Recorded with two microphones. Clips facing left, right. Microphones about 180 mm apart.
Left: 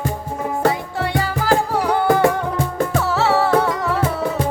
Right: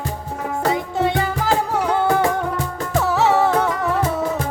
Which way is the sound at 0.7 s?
20° right (ahead or behind).